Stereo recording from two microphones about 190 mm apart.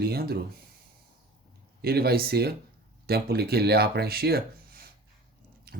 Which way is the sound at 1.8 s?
55° right (ahead or behind).